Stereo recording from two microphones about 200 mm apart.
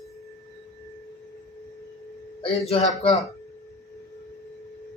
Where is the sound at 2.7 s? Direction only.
30° left (ahead or behind).